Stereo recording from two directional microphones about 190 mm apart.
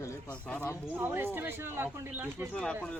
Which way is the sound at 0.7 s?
10° right (ahead or behind).